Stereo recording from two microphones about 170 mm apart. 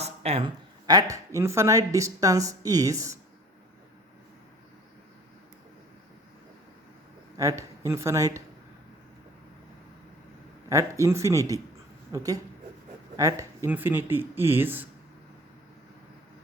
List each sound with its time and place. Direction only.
0.0 s speech: 40° right (ahead or behind); by 3.2 s 20° right (ahead or behind)
7.3 s speech: 20° right (ahead or behind)
10.7 s speech: 20° right (ahead or behind)